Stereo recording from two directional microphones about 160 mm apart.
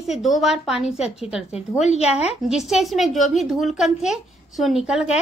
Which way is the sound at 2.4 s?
Centre (ahead or behind).